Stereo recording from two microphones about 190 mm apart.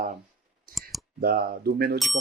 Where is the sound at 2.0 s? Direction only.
Centre (ahead or behind).